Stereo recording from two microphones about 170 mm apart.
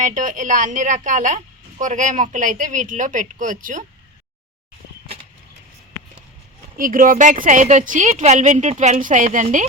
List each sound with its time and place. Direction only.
0.0 s a woman's voice: 50° right (ahead or behind)
6.7 s a woman's voice: 55° right (ahead or behind)